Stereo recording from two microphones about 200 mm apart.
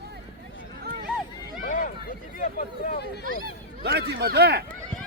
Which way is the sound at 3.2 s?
50° right (ahead or behind).